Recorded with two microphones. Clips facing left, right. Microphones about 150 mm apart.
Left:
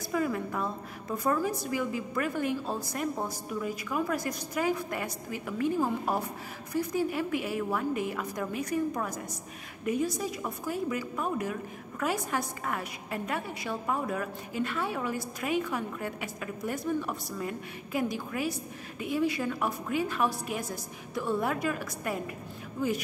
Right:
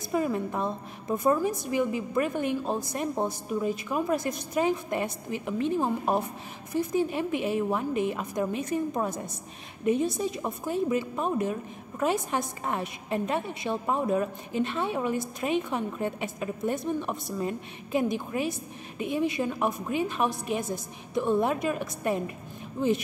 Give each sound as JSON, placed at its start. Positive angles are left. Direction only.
{"t": 0.1, "sound": "a woman's voice", "side_deg": -20}